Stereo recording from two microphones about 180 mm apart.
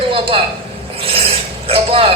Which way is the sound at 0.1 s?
30° right (ahead or behind).